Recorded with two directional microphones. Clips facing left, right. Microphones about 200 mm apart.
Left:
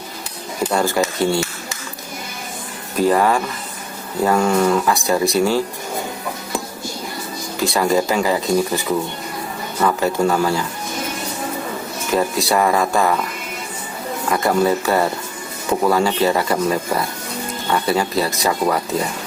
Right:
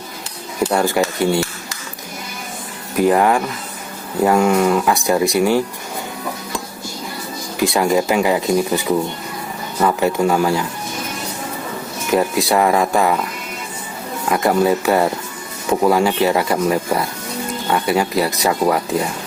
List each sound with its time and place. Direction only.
0.6 s speech: 15° right (ahead or behind)
3.0 s speech: 15° right (ahead or behind)
7.6 s speech: 15° right (ahead or behind)
9.8 s speech: 15° right (ahead or behind)
12.1 s speech: 15° right (ahead or behind)
14.3 s speech: 15° right (ahead or behind)